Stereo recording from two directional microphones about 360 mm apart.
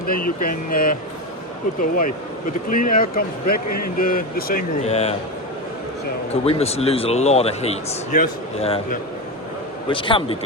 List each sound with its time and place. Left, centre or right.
0.1 s speech: left
3.7 s a man's voice: left
3.9 s speech: left
6.4 s a man's voice: centre